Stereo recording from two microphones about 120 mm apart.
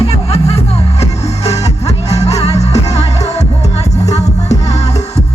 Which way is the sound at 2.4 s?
65° left (ahead or behind).